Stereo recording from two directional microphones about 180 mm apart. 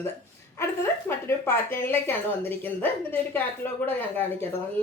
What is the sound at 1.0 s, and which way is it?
A woman's voice, 15° left (ahead or behind).